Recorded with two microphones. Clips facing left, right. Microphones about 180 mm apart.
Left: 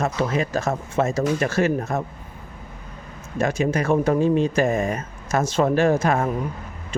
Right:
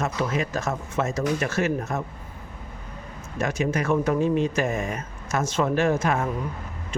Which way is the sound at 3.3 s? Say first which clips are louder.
Left 4 dB; 30° left (ahead or behind).